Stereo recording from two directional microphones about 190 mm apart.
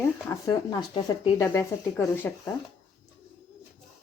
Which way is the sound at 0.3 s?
20° left (ahead or behind).